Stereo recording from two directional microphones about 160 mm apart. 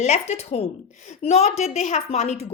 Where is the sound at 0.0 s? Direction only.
45° left (ahead or behind).